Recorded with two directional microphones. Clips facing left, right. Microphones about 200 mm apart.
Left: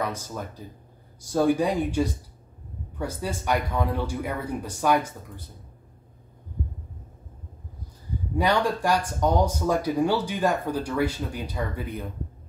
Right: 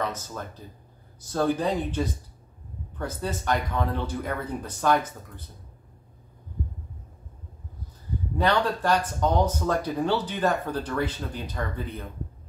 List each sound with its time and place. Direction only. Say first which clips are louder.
0.0 s speech: left 1 dB; 10° left (ahead or behind)
8.4 s speech: left 1 dB; 10° left (ahead or behind)